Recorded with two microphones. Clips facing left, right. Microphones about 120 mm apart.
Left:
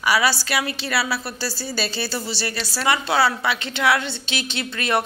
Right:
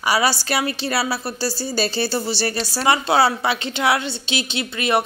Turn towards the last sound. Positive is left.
turn(degrees=-15)  # may be behind; listen again after turning